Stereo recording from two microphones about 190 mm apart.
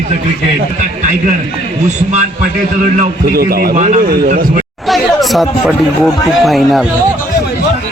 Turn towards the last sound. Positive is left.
turn(degrees=0)  # may be behind; listen again after turning